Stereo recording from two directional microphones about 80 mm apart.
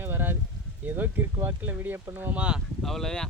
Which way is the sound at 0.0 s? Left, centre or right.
Right.